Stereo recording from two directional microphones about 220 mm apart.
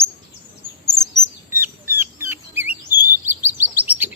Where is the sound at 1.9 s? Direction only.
10° right (ahead or behind).